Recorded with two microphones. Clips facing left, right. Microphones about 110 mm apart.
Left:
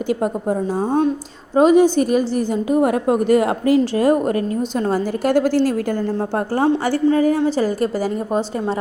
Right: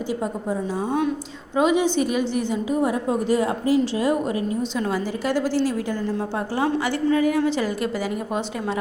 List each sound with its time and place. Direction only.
0.1 s a woman's voice: 60° left (ahead or behind)
0.8 s a woman's voice: 35° left (ahead or behind); by 3.8 s 60° left (ahead or behind)
3.8 s a woman's voice: 45° left (ahead or behind)
6.7 s a woman's voice: 35° left (ahead or behind)